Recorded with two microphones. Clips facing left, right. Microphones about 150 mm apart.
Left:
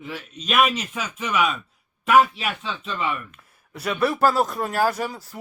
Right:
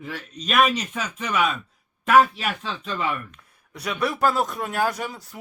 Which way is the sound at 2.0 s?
5° left (ahead or behind).